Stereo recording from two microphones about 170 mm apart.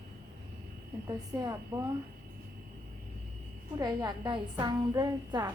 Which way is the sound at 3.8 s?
25° right (ahead or behind).